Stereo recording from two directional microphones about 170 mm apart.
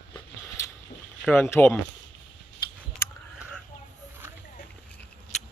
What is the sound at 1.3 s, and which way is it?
Speech, 10° left (ahead or behind).